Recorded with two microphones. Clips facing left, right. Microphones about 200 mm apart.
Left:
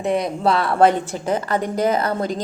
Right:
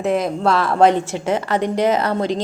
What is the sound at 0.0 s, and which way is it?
Speech, centre (ahead or behind).